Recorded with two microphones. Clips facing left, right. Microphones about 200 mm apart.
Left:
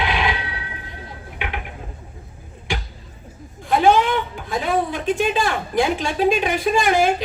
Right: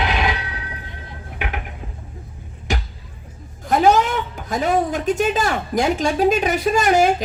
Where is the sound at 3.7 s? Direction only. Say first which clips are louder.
Even; 40° right (ahead or behind).